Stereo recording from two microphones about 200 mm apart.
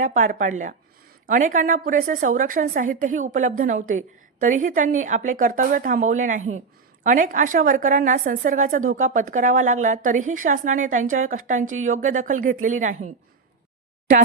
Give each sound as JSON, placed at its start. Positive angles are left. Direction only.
{"t": 0.0, "sound": "a woman's voice", "side_deg": -40}